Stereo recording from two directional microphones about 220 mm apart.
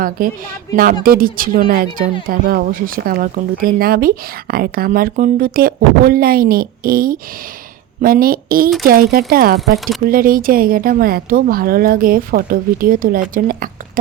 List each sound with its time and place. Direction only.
0.2 s speech: 40° right (ahead or behind)
9.7 s speech: centre (ahead or behind)
10.1 s a woman's voice: 40° right (ahead or behind)